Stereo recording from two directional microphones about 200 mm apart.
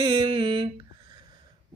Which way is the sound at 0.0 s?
20° right (ahead or behind).